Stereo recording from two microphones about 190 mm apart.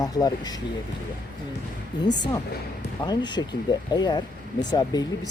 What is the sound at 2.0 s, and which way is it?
Speech, 20° left (ahead or behind).